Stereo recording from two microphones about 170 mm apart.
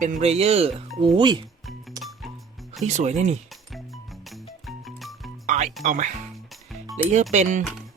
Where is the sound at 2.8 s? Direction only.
45° right (ahead or behind).